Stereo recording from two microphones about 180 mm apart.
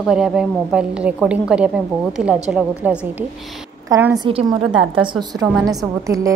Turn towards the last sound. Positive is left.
turn(degrees=-20)  # may be behind; listen again after turning